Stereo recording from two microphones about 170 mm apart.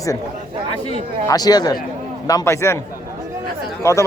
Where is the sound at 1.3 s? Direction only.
25° left (ahead or behind).